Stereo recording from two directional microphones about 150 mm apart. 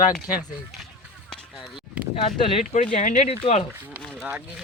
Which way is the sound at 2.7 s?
55° left (ahead or behind).